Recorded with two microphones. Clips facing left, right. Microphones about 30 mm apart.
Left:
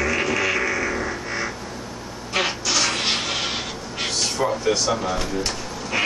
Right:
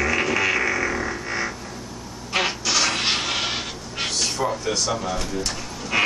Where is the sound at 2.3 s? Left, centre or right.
Centre.